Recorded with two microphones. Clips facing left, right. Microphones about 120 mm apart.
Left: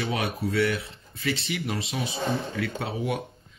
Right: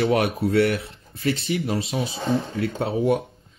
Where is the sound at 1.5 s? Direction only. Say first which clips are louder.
Right 6 dB; 30° right (ahead or behind).